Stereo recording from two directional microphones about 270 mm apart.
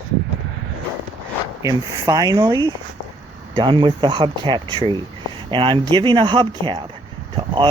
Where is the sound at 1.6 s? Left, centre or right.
Centre.